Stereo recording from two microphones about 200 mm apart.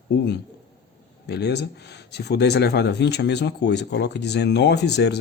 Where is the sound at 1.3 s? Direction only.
55° left (ahead or behind).